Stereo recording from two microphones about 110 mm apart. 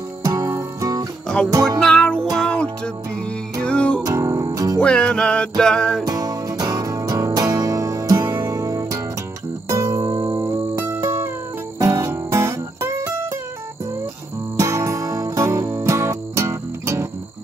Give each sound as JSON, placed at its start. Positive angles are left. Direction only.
{"t": 0.2, "sound": "music", "side_deg": -30}
{"t": 1.8, "sound": "music", "side_deg": 5}
{"t": 4.0, "sound": "music", "side_deg": -30}
{"t": 4.7, "sound": "music", "side_deg": 10}
{"t": 6.0, "sound": "music", "side_deg": -35}
{"t": 14.6, "sound": "music", "side_deg": -30}